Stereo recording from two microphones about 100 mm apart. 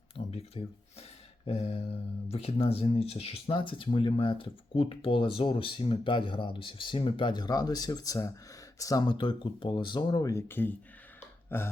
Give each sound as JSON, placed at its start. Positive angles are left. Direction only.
{"t": 0.3, "sound": "speech", "side_deg": 90}
{"t": 3.4, "sound": "speech", "side_deg": 60}
{"t": 9.0, "sound": "speech", "side_deg": 55}
{"t": 10.5, "sound": "speech", "side_deg": 20}